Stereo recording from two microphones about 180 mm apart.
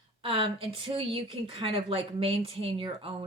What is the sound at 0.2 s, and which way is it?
Speech, 30° right (ahead or behind).